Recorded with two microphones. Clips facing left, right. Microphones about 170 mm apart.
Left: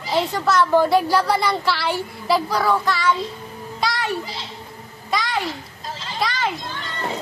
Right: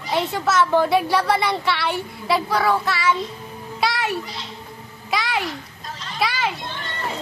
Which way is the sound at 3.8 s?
5° right (ahead or behind).